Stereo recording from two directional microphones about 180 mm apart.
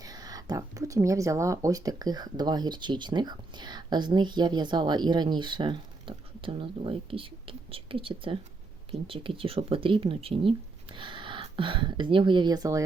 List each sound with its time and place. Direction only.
0.0 s speech: 20° right (ahead or behind)